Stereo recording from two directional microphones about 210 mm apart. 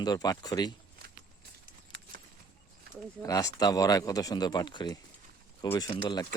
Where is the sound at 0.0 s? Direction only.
20° left (ahead or behind).